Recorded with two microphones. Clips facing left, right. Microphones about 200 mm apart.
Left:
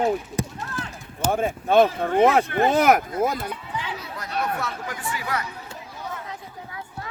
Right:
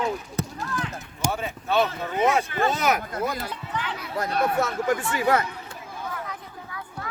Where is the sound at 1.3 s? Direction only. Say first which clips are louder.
Left 7 dB; 50° left (ahead or behind).